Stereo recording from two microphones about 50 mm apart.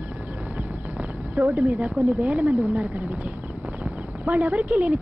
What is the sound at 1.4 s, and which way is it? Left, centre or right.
Speech, right.